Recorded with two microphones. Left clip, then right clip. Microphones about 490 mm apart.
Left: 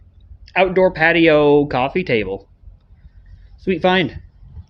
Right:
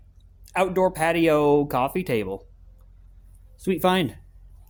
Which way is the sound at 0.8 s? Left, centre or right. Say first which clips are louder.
Left 8 dB; right.